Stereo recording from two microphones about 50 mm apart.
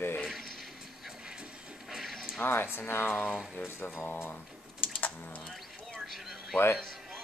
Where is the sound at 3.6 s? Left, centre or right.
Left.